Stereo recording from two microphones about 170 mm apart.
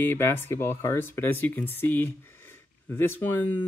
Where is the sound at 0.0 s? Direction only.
15° left (ahead or behind).